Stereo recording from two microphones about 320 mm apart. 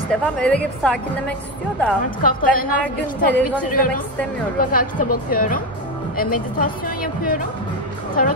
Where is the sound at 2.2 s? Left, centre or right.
Left.